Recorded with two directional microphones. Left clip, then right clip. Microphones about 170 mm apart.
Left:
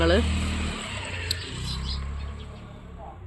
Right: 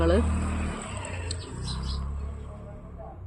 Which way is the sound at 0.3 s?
35° right (ahead or behind).